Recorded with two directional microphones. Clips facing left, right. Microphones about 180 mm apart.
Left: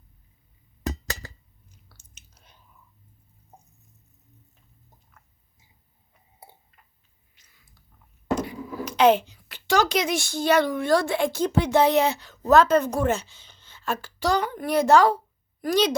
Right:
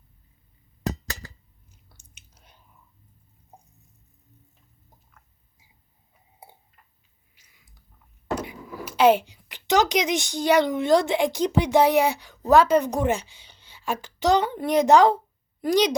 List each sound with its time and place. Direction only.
1.9 s chewing: 15° right (ahead or behind)
7.3 s a sound: 10° right (ahead or behind)
8.4 s a woman's voice: 10° right (ahead or behind)